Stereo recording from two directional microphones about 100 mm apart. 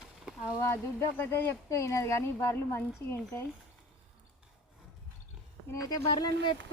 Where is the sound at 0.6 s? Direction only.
25° left (ahead or behind).